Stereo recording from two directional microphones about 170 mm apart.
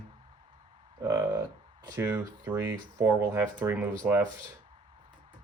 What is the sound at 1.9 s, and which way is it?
Speech, 15° right (ahead or behind).